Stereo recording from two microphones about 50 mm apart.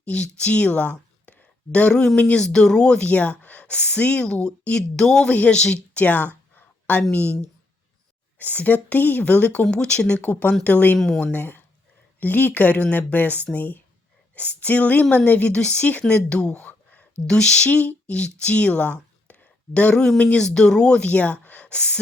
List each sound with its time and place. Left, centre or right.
0.0 s a woman's voice: left
1.9 s speech: centre
3.1 s speech: left
4.2 s a woman's voice: centre
8.4 s speech: left
10.6 s speech: left
10.9 s speech: centre
11.3 s speech: left
17.2 s speech: centre
17.7 s speech: left
19.9 s speech: centre